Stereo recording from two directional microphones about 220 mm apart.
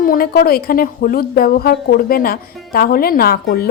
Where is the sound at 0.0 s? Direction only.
40° left (ahead or behind).